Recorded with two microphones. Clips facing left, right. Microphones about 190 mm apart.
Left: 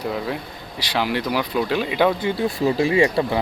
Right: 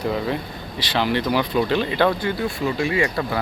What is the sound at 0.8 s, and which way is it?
Speech, 10° left (ahead or behind).